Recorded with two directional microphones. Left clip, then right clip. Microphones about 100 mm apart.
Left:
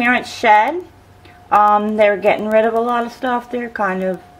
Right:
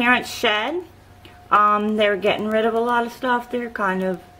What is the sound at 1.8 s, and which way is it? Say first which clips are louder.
Speech: left 5 dB; 15° right (ahead or behind).